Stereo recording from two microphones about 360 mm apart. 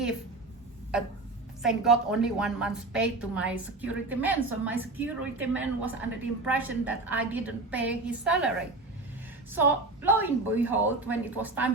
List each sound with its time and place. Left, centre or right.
1.6 s a woman's voice: centre